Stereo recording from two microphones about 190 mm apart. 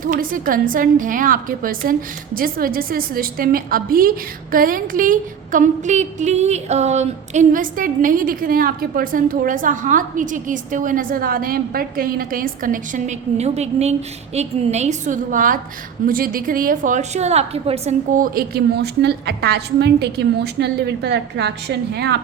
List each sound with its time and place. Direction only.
0.0 s a woman's voice: 45° right (ahead or behind)